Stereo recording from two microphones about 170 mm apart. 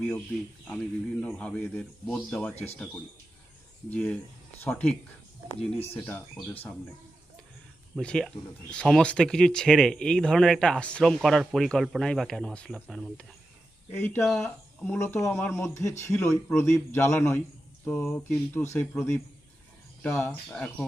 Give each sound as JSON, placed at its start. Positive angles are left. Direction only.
{"t": 0.7, "sound": "speech", "side_deg": 5}
{"t": 6.1, "sound": "speech", "side_deg": 10}
{"t": 7.9, "sound": "speech", "side_deg": 0}